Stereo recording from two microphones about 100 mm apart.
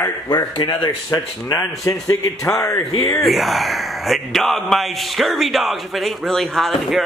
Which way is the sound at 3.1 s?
Centre (ahead or behind).